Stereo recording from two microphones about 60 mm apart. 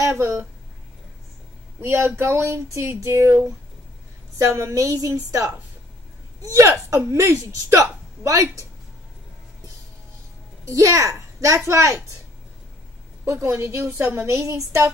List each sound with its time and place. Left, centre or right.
0.1 s speech: right
1.8 s speech: right
4.4 s speech: right
4.9 s a child's voice: right
7.5 s a woman's voice: right
10.6 s a child's voice: right
13.2 s a woman's voice: right
14.2 s speech: right